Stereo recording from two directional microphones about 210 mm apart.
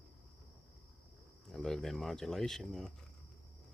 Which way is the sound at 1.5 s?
Centre (ahead or behind).